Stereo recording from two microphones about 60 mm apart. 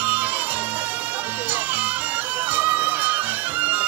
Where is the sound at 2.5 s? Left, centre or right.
Right.